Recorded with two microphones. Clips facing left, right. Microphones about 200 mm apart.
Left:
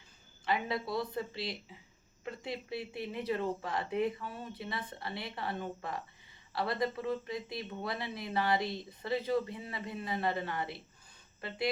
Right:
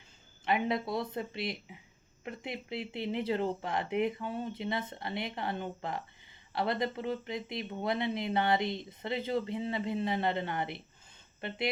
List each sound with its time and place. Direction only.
0.4 s speech: 20° right (ahead or behind)